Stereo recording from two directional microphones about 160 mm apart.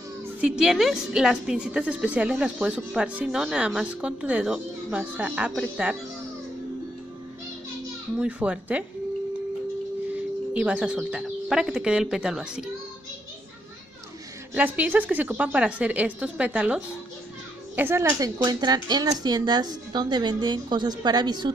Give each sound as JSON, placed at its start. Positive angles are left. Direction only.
{"t": 0.4, "sound": "a woman's voice", "side_deg": -5}
{"t": 8.2, "sound": "a woman's voice", "side_deg": -10}
{"t": 10.5, "sound": "a woman's voice", "side_deg": -5}
{"t": 14.5, "sound": "a woman's voice", "side_deg": -10}
{"t": 18.4, "sound": "speech", "side_deg": -25}